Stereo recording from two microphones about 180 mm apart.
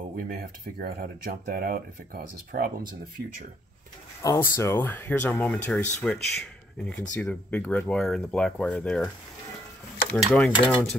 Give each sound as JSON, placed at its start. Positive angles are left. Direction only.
{"t": 0.2, "sound": "speech", "side_deg": -55}
{"t": 4.2, "sound": "speech", "side_deg": 15}
{"t": 10.1, "sound": "speech", "side_deg": 5}